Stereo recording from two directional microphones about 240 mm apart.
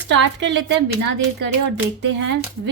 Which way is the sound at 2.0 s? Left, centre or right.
Right.